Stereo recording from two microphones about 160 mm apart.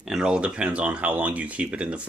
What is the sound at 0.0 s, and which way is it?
Speech, 5° right (ahead or behind).